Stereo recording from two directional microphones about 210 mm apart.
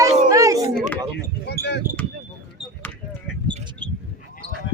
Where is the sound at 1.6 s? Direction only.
50° left (ahead or behind).